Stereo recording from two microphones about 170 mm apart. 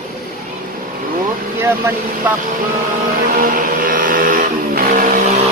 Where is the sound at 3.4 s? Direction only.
55° right (ahead or behind).